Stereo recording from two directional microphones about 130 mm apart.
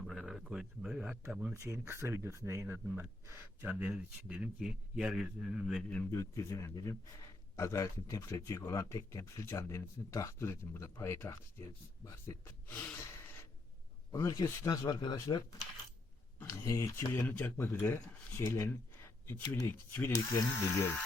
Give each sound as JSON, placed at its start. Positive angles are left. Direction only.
{"t": 0.3, "sound": "speech", "side_deg": -5}
{"t": 1.5, "sound": "speech", "side_deg": -20}
{"t": 6.1, "sound": "speech", "side_deg": 25}
{"t": 14.1, "sound": "speech", "side_deg": 25}
{"t": 16.6, "sound": "speech", "side_deg": 25}